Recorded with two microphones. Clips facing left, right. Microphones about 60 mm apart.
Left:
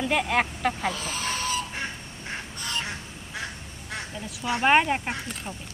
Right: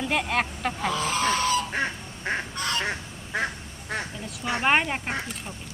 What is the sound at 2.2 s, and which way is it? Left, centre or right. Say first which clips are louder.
Goose: right 7 dB; right.